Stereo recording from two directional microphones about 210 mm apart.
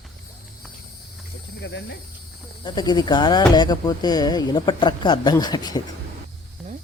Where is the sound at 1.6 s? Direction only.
55° left (ahead or behind).